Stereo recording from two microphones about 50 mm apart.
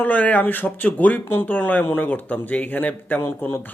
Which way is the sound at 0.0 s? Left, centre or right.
Left.